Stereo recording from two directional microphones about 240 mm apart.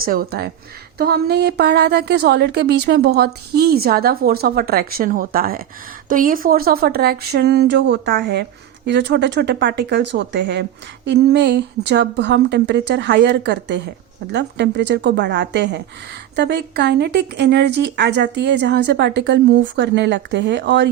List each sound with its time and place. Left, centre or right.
0.0 s a woman's voice: right